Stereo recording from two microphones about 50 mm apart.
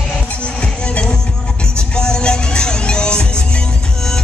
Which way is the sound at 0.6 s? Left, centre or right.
Left.